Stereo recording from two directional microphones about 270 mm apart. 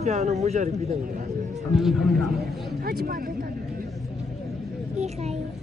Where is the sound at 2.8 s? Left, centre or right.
Right.